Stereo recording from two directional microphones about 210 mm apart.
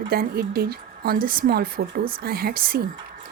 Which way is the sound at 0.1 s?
45° right (ahead or behind).